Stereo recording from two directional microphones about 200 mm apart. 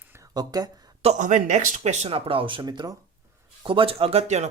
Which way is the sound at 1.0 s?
40° right (ahead or behind).